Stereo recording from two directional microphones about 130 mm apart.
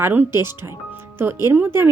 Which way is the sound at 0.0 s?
15° right (ahead or behind).